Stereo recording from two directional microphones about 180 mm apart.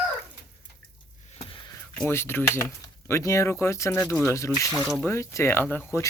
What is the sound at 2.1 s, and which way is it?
Speech, 15° left (ahead or behind).